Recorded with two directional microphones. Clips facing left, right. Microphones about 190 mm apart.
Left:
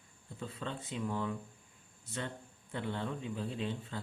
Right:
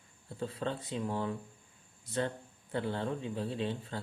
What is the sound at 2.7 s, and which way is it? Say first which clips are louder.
Speech: right 4 dB; 35° right (ahead or behind).